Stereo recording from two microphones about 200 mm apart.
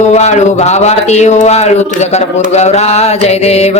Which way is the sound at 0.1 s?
35° left (ahead or behind).